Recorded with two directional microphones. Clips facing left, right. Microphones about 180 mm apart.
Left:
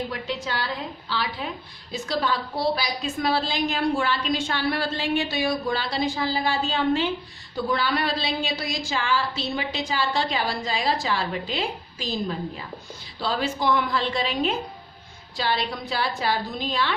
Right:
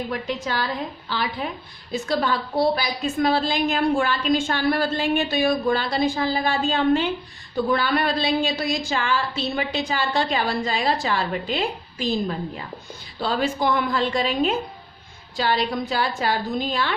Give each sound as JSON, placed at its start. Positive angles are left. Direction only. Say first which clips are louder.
{"t": 0.1, "sound": "a woman's voice", "louder": "right 3 dB", "side_deg": -50}
{"t": 1.9, "sound": "a woman's voice", "louder": "right 3 dB", "side_deg": -50}
{"t": 13.1, "sound": "a woman's voice", "louder": "right 3 dB", "side_deg": -50}